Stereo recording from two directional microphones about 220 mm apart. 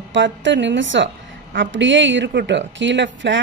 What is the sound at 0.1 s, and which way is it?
Speech, 55° right (ahead or behind).